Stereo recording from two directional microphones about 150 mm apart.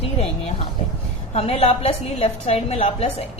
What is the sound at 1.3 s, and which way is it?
Speech, 45° left (ahead or behind).